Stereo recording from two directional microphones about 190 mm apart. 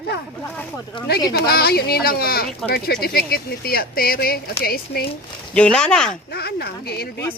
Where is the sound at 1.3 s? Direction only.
55° left (ahead or behind).